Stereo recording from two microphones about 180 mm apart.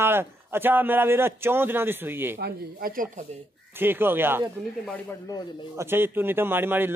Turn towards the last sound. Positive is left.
turn(degrees=-10)  # may be behind; listen again after turning